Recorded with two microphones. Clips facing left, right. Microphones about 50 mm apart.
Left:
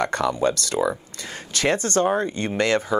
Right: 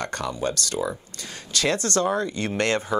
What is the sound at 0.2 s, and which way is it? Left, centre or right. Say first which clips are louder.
Speech: left 5 dB; left.